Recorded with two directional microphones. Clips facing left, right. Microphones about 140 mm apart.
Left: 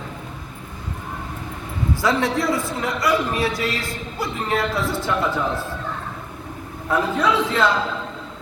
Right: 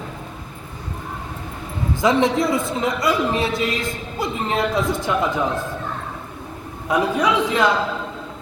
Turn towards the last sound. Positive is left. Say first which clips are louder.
# right 1 dB
turn(degrees=-15)  # may be behind; listen again after turning